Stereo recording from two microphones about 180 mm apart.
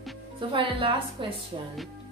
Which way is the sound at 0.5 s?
30° right (ahead or behind).